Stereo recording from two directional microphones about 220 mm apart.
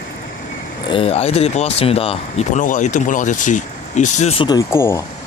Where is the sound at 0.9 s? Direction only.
25° left (ahead or behind).